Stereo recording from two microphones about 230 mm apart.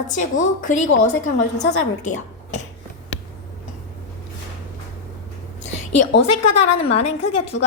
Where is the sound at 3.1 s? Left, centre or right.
Left.